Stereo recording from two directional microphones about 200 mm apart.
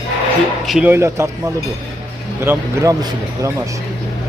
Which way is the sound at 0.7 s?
5° right (ahead or behind).